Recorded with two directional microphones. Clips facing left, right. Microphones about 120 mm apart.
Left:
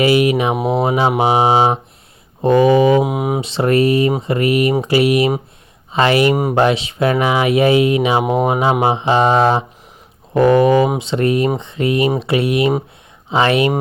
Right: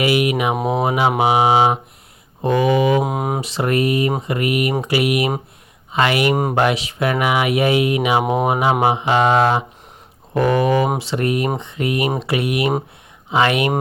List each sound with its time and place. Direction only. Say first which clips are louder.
0.0 s mantra: left 4 dB; 30° left (ahead or behind)
0.9 s speech: left 1 dB; 30° left (ahead or behind)
1.2 s mantra: left 1 dB; 35° left (ahead or behind)
2.4 s speech: left 5 dB; 30° left (ahead or behind)
3.0 s speech: left 3 dB; 10° left (ahead or behind)
3.4 s speech: left 6 dB; 25° left (ahead or behind)
4.2 s mantra: left 4 dB; 30° left (ahead or behind)
4.8 s speech: left 5 dB; 30° left (ahead or behind)
6.3 s speech: left 2 dB; 10° left (ahead or behind)
6.6 s speech: left 3 dB; 25° left (ahead or behind)